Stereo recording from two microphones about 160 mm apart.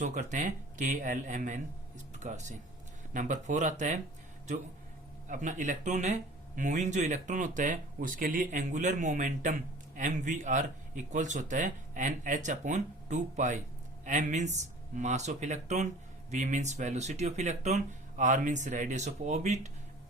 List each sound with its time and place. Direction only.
0.0 s speech: 50° right (ahead or behind)
5.3 s speech: 50° right (ahead or behind)